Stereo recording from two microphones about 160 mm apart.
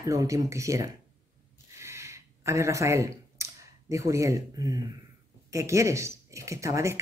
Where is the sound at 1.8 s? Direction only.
15° right (ahead or behind).